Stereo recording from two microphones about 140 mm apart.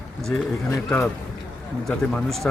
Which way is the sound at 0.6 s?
20° left (ahead or behind).